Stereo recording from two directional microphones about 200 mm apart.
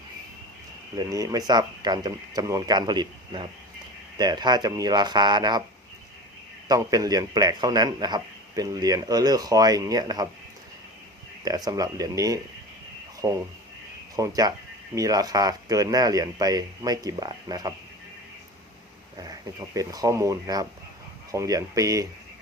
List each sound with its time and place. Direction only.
0.9 s speech: 20° right (ahead or behind)
6.7 s speech: 15° right (ahead or behind)
11.4 s speech: 20° right (ahead or behind)
19.1 s speech: 15° right (ahead or behind)